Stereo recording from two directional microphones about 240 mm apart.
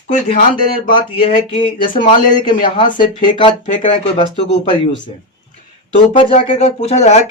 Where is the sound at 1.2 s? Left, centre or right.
Left.